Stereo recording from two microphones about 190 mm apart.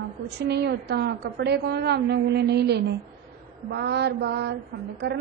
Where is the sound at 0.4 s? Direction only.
60° right (ahead or behind).